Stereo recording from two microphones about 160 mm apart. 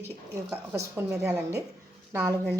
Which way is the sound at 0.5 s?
10° right (ahead or behind).